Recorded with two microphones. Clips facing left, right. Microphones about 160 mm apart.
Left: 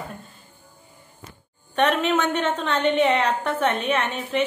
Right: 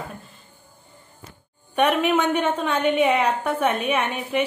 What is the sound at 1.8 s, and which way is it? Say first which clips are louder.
A woman's voice: right 1 dB; 10° right (ahead or behind).